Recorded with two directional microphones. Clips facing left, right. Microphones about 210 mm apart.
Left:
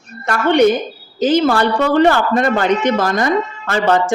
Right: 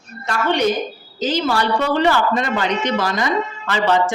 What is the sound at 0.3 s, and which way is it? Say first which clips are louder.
A woman's voice: left 6 dB; 55° left (ahead or behind).